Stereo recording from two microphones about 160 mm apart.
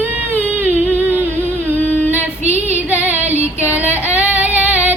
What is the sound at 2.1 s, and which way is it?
Female singing, 10° right (ahead or behind).